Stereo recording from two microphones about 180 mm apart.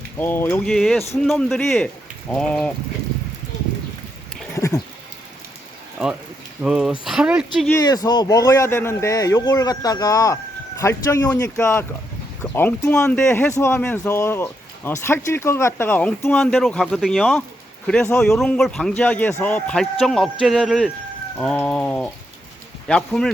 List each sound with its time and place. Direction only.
0.2 s speech: 10° left (ahead or behind)
4.5 s a sound: 15° left (ahead or behind)
6.6 s speech: 5° right (ahead or behind)
7.7 s speech: 20° left (ahead or behind); by 23.3 s 5° left (ahead or behind)